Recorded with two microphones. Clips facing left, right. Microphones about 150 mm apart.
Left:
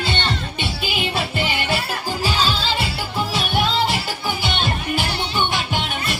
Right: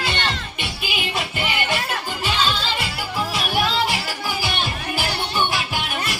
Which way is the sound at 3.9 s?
25° left (ahead or behind).